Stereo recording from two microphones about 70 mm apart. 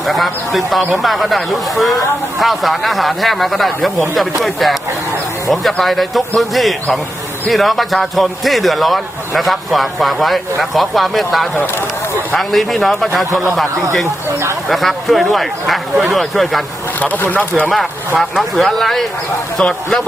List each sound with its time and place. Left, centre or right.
0.1 s speech: centre
5.8 s speech: centre
14.7 s speech: centre
17.0 s speech: left
18.2 s speech: centre